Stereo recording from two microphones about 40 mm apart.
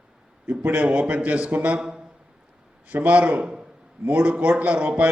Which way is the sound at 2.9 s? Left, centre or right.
Right.